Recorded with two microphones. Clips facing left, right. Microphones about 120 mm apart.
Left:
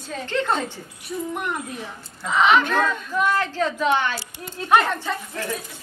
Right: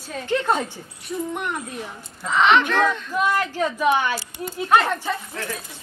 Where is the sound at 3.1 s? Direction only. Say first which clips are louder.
Even; 15° right (ahead or behind).